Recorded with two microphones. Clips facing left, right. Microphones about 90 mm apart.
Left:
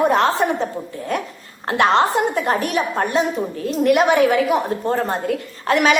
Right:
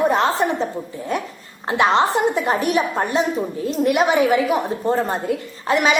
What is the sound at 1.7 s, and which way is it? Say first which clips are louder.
A woman's voice: left 1 dB; centre (ahead or behind).